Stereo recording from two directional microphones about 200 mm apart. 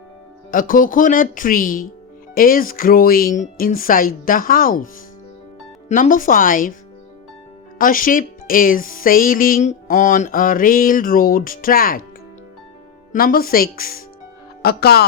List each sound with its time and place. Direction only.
0.5 s speech: 40° left (ahead or behind)
5.9 s speech: 40° left (ahead or behind)
7.8 s speech: 45° left (ahead or behind)
13.1 s speech: 45° left (ahead or behind)